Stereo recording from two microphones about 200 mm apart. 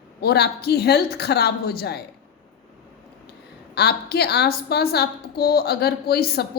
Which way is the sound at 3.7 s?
55° left (ahead or behind).